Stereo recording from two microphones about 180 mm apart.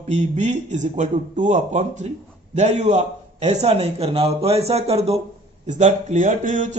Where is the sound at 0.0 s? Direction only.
40° right (ahead or behind).